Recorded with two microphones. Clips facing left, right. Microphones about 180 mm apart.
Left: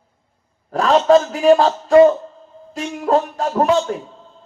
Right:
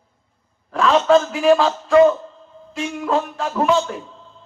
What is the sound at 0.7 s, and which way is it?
A man's voice, 40° left (ahead or behind).